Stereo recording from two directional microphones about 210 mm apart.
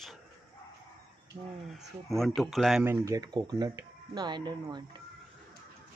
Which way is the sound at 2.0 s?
Centre (ahead or behind).